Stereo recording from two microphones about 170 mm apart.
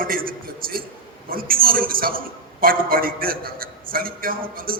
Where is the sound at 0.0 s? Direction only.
60° right (ahead or behind).